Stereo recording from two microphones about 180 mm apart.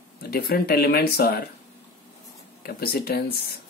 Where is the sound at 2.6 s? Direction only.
55° left (ahead or behind).